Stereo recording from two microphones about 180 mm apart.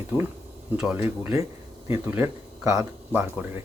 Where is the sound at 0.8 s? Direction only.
5° right (ahead or behind).